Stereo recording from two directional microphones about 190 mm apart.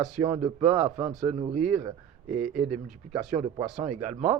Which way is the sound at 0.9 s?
40° right (ahead or behind).